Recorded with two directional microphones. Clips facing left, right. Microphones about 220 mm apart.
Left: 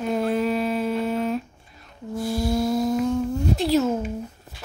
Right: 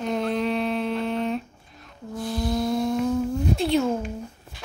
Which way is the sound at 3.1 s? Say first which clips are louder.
Left 1 dB; centre (ahead or behind).